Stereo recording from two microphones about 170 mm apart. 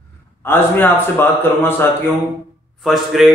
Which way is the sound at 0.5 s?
10° left (ahead or behind).